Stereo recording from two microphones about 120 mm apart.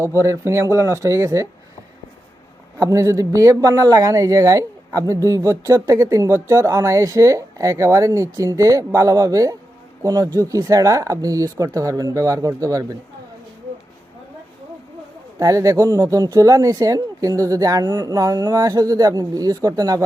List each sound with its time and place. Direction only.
0.2 s speech: 25° right (ahead or behind)
2.7 s speech: 25° right (ahead or behind)
15.4 s speech: 25° right (ahead or behind)